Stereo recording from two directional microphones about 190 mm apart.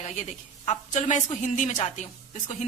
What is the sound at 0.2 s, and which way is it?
A woman's voice, 35° left (ahead or behind).